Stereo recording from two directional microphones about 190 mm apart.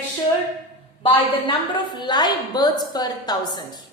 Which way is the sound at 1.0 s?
25° left (ahead or behind).